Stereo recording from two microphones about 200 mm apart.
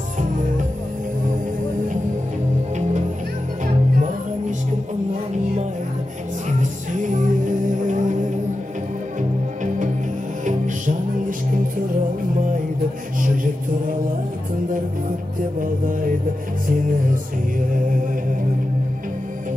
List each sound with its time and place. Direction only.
6.6 s music: 40° right (ahead or behind)
10.4 s music: 40° right (ahead or behind)
13.2 s music: 45° right (ahead or behind)